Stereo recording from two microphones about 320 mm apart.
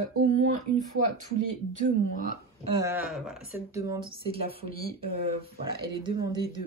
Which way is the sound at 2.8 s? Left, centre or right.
Centre.